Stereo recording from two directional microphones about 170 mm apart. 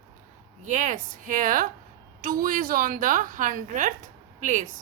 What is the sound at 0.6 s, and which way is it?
A woman's voice, 50° right (ahead or behind).